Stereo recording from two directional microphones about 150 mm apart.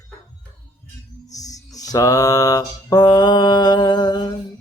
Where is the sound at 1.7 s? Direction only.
25° left (ahead or behind).